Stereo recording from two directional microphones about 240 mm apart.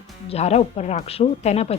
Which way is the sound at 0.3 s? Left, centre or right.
Left.